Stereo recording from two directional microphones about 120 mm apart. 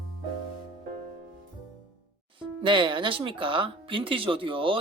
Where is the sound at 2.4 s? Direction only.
45° right (ahead or behind).